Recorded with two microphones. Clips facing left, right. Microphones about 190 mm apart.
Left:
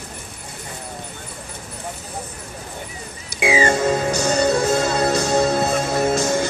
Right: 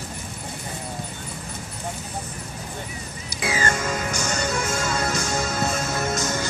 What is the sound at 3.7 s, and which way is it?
Music, 35° left (ahead or behind).